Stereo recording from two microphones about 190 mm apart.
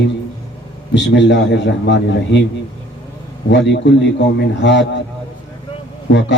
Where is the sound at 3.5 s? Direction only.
65° left (ahead or behind).